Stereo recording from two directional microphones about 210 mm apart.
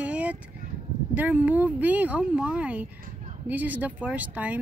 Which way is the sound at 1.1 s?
10° right (ahead or behind).